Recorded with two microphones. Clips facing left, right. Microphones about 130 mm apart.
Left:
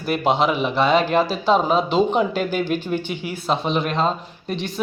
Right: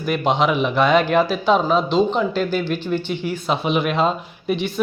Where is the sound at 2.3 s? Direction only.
45° left (ahead or behind).